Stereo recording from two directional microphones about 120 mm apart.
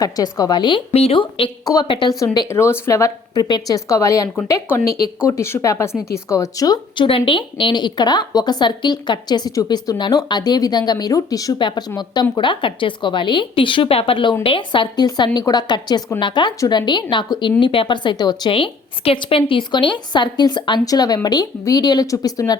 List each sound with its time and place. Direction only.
0.0 s a woman's voice: 30° left (ahead or behind)
0.9 s a woman's voice: 60° left (ahead or behind)
1.6 s a woman's voice: 35° left (ahead or behind)
2.5 s speech: 20° left (ahead or behind)
6.9 s a woman's voice: 45° left (ahead or behind)
18.5 s a woman's voice: 50° left (ahead or behind); by 22.5 s 30° left (ahead or behind)